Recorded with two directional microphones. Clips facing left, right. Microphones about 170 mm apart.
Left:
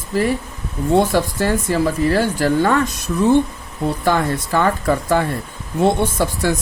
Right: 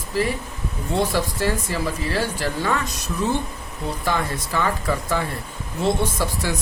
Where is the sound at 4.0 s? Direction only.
55° left (ahead or behind).